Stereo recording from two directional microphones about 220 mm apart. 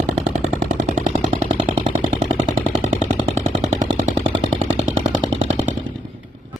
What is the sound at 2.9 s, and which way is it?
Vehicle, 35° right (ahead or behind).